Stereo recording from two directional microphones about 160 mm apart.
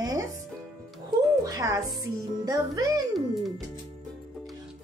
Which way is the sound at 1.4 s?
20° right (ahead or behind).